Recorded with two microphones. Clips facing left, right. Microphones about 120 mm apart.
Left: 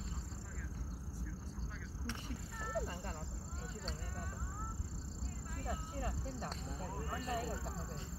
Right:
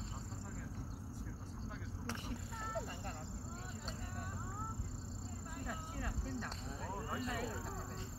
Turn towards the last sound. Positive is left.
turn(degrees=30)  # may be behind; listen again after turning